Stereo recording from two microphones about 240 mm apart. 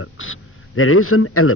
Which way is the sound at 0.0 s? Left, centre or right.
Left.